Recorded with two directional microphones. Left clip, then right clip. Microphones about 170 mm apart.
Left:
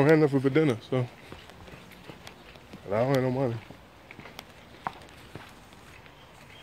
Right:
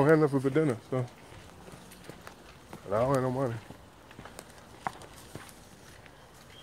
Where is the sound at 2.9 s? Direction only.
25° left (ahead or behind).